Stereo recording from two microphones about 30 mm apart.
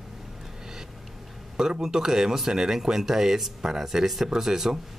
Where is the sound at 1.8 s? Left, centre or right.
Centre.